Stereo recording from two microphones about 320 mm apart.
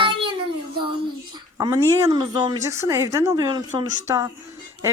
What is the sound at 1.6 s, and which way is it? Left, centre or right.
Speech, centre.